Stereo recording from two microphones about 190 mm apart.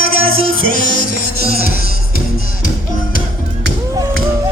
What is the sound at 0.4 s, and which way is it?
Music, 50° left (ahead or behind).